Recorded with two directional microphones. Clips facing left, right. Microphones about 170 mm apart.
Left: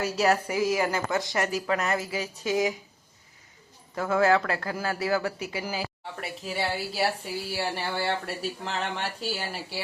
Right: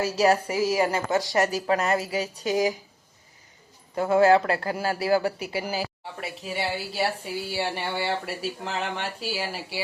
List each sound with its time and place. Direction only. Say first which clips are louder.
0.0 s a woman's voice: right 3 dB; 30° right (ahead or behind)
3.9 s a man's voice: right 4 dB; 30° right (ahead or behind)
6.4 s speech: even; centre (ahead or behind)